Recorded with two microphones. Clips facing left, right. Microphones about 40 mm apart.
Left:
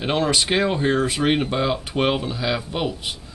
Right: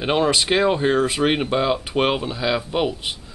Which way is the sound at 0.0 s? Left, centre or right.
Centre.